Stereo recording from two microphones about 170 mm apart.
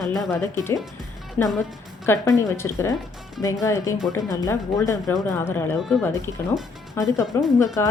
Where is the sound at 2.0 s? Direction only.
15° left (ahead or behind).